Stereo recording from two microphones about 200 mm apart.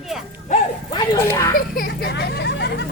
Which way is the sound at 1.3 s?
15° left (ahead or behind).